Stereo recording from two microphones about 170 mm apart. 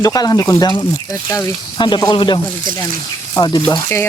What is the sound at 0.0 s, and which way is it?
Speech, 20° left (ahead or behind).